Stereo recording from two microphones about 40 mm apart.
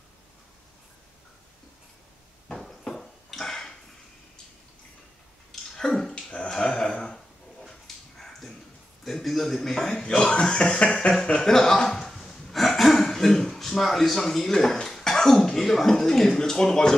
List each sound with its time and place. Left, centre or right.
2.4 s a sound: centre
5.8 s dog: centre
6.2 s a sound: centre
7.6 s dog: centre
9.0 s a man's voice: centre
10.0 s speech: left